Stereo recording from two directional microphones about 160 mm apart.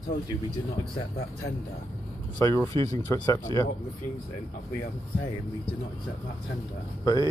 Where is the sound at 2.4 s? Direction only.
20° left (ahead or behind).